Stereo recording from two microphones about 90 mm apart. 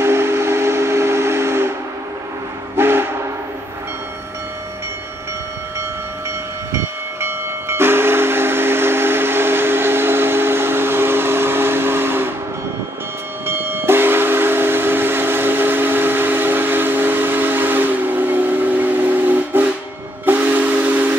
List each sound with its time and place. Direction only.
0.0 s steam whistle: 25° right (ahead or behind)
2.8 s train: 25° right (ahead or behind)
6.7 s train: 30° right (ahead or behind)
13.5 s train: 25° right (ahead or behind)
20.2 s steam whistle: 20° right (ahead or behind)